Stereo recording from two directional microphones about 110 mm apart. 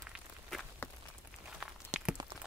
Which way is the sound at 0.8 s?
20° left (ahead or behind).